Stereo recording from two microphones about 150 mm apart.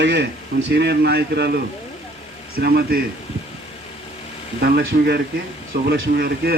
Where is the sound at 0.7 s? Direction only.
90° right.